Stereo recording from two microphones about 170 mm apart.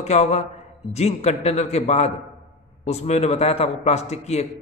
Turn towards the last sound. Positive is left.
turn(degrees=40)  # may be behind; listen again after turning